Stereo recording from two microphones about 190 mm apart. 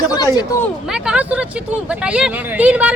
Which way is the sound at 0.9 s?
5° right (ahead or behind).